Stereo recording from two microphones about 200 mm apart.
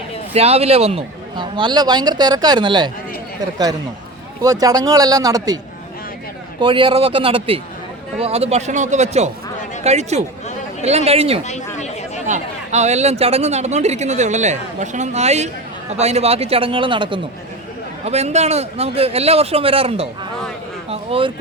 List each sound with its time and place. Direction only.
0.3 s a man's voice: 30° right (ahead or behind)
4.4 s a man's voice: 20° right (ahead or behind)
6.6 s a man's voice: 25° right (ahead or behind)
11.4 s chatter: 35° left (ahead or behind)
12.2 s a man's voice: 35° right (ahead or behind)